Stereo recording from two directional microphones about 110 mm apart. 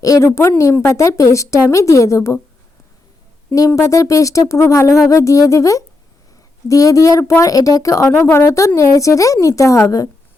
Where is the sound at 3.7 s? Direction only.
25° left (ahead or behind).